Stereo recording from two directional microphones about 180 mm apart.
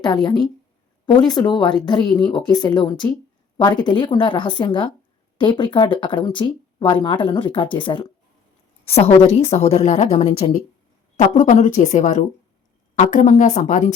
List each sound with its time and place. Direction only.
0.0 s a woman's voice: 25° left (ahead or behind); by 13.9 s 45° left (ahead or behind)